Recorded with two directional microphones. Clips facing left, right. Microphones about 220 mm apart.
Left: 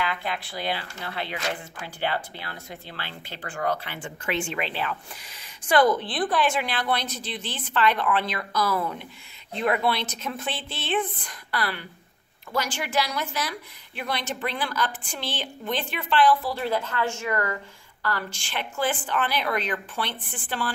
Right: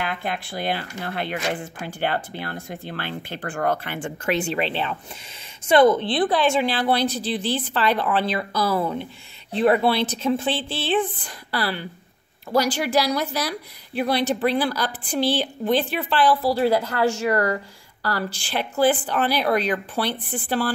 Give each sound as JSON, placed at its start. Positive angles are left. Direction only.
{"t": 0.0, "sound": "a woman's voice", "side_deg": -50}